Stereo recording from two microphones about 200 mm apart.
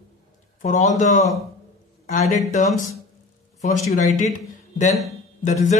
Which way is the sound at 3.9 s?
40° left (ahead or behind).